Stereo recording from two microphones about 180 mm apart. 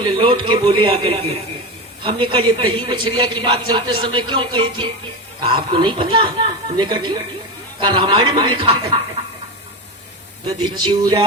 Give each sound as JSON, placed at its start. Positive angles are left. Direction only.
{"t": 0.2, "sound": "a man's voice", "side_deg": -30}
{"t": 10.6, "sound": "a man's voice", "side_deg": -25}